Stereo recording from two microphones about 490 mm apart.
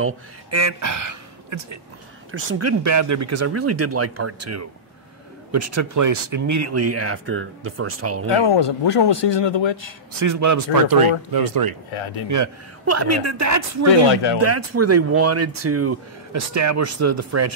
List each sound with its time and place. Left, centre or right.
0.0 s speech: right
8.5 s speech: left
10.2 s speech: right
12.3 s speech: right